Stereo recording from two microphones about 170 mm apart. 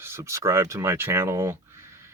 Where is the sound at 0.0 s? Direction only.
15° right (ahead or behind).